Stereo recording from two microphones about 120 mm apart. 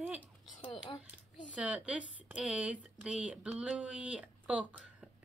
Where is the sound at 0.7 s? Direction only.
35° left (ahead or behind).